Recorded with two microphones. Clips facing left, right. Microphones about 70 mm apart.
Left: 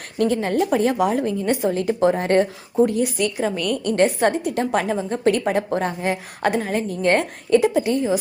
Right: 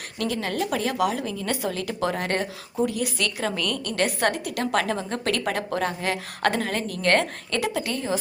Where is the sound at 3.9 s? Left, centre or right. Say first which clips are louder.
Left 7 dB; left.